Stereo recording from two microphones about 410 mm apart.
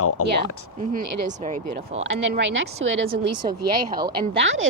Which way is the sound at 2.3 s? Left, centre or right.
Right.